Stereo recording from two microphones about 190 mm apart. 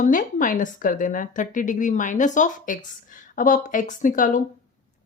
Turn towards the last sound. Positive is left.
turn(degrees=45)  # may be behind; listen again after turning